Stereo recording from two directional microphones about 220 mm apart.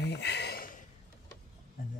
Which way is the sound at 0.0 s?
50° left (ahead or behind).